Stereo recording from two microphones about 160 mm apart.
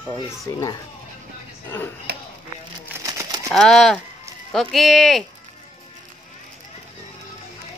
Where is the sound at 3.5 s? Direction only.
5° left (ahead or behind).